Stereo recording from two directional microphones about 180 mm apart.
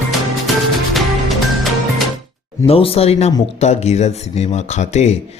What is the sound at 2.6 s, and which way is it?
Speech, 30° left (ahead or behind).